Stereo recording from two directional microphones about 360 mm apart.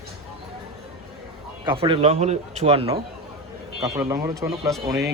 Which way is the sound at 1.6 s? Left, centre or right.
Centre.